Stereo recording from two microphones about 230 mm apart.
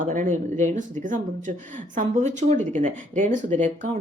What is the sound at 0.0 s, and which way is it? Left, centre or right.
Speech, right.